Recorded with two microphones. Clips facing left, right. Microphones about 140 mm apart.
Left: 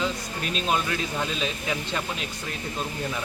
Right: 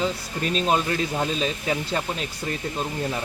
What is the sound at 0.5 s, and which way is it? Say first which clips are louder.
Speech: right 4 dB; 35° right (ahead or behind).